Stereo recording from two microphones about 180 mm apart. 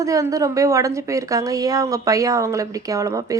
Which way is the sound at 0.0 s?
15° right (ahead or behind).